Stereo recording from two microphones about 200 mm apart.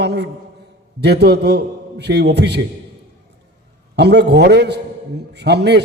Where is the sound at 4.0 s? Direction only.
55° right (ahead or behind).